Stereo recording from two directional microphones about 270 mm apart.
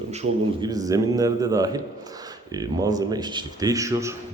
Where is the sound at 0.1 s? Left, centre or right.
Right.